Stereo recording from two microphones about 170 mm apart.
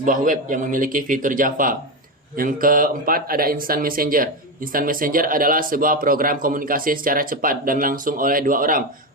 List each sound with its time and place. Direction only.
0.0 s a man's voice: 50° right (ahead or behind)